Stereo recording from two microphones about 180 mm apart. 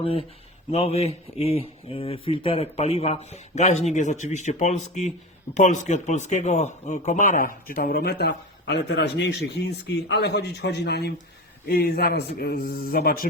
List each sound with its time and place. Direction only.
0.0 s a man's voice: 30° left (ahead or behind); by 13.2 s 55° left (ahead or behind)